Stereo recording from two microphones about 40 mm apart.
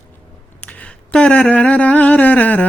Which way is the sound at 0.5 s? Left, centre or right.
Left.